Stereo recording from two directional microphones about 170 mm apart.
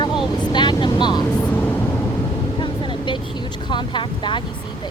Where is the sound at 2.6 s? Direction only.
30° left (ahead or behind).